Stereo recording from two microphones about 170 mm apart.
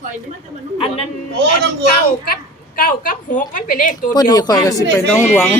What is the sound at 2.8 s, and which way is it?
A woman's voice, 50° left (ahead or behind).